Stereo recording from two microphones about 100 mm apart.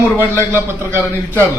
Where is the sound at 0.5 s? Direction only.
25° right (ahead or behind).